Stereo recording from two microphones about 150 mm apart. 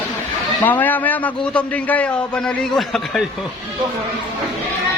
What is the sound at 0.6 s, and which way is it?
A man's voice, 10° left (ahead or behind).